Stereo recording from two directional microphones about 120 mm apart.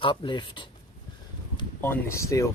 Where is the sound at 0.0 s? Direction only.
45° left (ahead or behind).